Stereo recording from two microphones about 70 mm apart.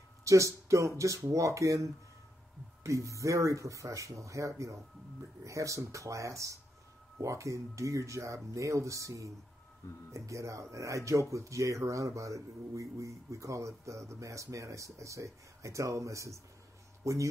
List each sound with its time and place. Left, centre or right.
0.2 s a man's voice: right